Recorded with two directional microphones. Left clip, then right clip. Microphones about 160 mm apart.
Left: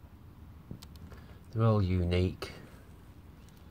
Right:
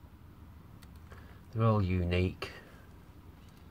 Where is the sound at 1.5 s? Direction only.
Centre (ahead or behind).